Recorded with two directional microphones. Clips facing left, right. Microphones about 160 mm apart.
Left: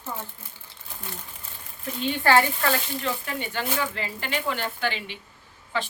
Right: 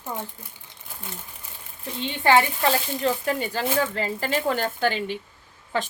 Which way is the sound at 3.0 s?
40° right (ahead or behind).